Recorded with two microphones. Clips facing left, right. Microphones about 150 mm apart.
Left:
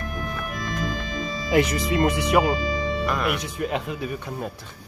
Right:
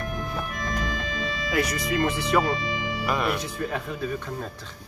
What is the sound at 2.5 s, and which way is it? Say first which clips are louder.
Music: left 4 dB; 35° left (ahead or behind).